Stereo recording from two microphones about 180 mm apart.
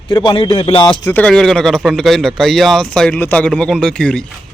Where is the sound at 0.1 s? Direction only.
25° left (ahead or behind).